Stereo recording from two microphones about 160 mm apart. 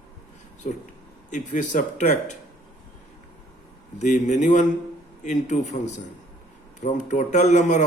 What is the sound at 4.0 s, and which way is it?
A man's voice, 50° left (ahead or behind).